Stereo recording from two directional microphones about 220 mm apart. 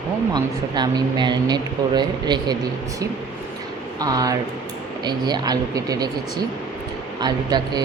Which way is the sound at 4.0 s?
15° right (ahead or behind).